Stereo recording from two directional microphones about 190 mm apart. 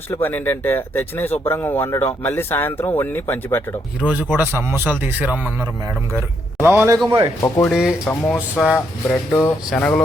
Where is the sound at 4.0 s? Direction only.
10° right (ahead or behind).